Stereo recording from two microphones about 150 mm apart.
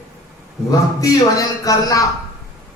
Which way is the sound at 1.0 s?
25° left (ahead or behind).